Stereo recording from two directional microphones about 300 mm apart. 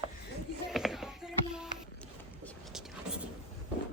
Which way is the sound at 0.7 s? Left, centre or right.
Centre.